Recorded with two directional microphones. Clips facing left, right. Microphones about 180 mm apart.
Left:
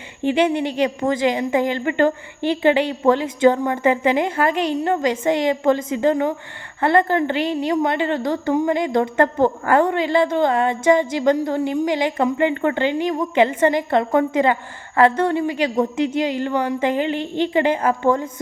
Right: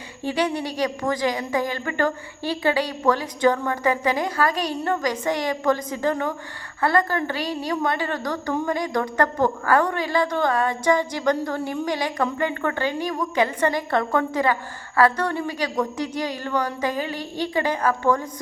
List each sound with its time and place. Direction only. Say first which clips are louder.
0.2 s a woman's voice: left 6 dB; 20° left (ahead or behind)